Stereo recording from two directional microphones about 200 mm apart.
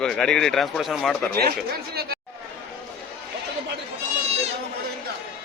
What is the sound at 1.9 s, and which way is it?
Speech, 50° right (ahead or behind).